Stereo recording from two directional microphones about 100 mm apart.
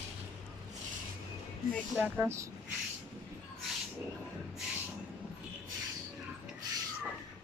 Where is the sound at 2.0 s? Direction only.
20° right (ahead or behind).